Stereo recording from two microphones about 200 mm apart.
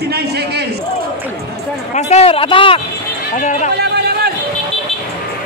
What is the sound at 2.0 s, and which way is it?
Speech, 30° left (ahead or behind).